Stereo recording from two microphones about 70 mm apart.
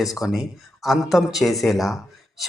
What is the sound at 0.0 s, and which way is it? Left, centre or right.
Speech, centre.